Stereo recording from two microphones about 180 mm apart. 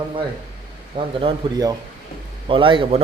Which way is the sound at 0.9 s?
30° right (ahead or behind).